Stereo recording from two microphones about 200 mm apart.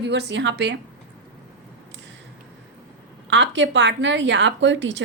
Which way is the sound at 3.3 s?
65° right (ahead or behind).